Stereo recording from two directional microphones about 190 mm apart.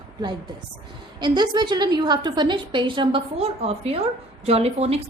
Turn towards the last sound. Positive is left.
turn(degrees=-35)  # may be behind; listen again after turning